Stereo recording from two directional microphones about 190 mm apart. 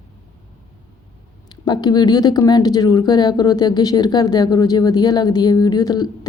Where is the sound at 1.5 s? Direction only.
20° left (ahead or behind).